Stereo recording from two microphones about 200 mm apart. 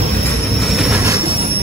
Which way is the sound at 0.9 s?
15° right (ahead or behind).